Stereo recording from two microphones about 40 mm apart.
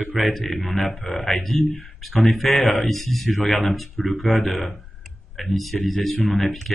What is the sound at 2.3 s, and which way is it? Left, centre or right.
A man's voice, centre.